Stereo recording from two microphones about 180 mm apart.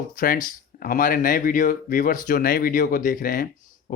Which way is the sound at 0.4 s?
50° left (ahead or behind).